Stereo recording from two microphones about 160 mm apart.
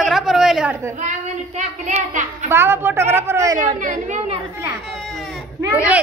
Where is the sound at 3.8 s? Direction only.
50° right (ahead or behind).